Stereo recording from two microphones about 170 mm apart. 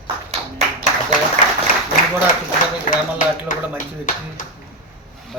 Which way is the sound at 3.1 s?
50° left (ahead or behind).